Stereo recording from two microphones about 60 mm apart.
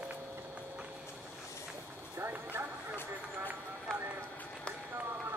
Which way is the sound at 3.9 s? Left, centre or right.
Centre.